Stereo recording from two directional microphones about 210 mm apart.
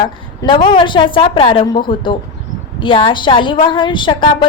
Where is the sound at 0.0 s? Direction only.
20° left (ahead or behind).